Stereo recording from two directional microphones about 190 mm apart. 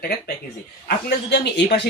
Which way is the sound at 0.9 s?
65° left (ahead or behind).